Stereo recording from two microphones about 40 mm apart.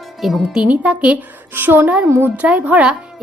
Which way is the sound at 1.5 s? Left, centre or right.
Right.